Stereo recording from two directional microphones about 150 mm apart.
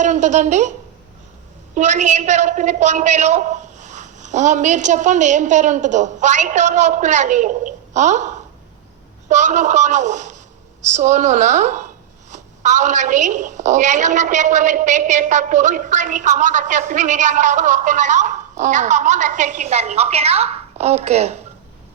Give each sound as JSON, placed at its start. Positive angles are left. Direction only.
{"t": 0.0, "sound": "a man's voice", "side_deg": -55}
{"t": 1.7, "sound": "a man's voice", "side_deg": -55}
{"t": 9.3, "sound": "a man's voice", "side_deg": -55}